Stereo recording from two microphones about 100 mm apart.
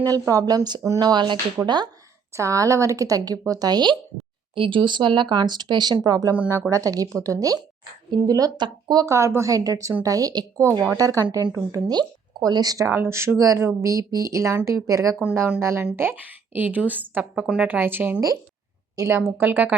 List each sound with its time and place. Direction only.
0.1 s speech: 35° right (ahead or behind)
2.3 s speech: 30° right (ahead or behind)
4.5 s speech: 60° right (ahead or behind)
9.0 s speech: 30° right (ahead or behind)
12.9 s a woman's voice: 25° right (ahead or behind)
18.9 s speech: 30° right (ahead or behind)
19.2 s speech: 20° right (ahead or behind)